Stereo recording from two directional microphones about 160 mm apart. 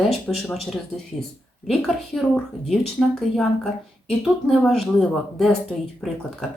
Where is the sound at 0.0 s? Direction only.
Centre (ahead or behind).